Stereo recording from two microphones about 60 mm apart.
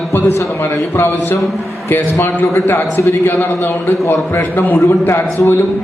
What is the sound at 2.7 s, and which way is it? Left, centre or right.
A man's voice, left.